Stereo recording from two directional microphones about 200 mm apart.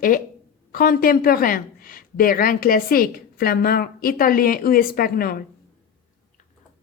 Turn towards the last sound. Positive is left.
turn(degrees=50)  # may be behind; listen again after turning